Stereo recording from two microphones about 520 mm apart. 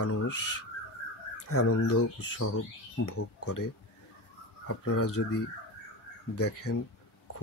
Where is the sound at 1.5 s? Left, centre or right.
Left.